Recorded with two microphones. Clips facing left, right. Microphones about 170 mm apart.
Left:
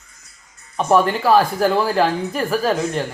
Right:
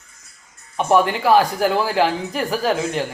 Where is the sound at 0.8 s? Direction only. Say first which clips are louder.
Left 1 dB; 20° right (ahead or behind).